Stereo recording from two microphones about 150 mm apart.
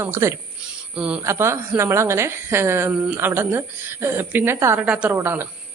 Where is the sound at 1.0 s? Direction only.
5° right (ahead or behind).